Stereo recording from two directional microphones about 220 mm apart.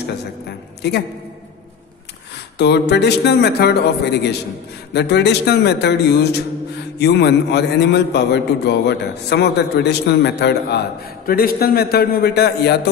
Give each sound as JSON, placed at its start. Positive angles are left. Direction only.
{"t": 0.0, "sound": "a man's voice", "side_deg": 50}
{"t": 2.5, "sound": "a man's voice", "side_deg": 50}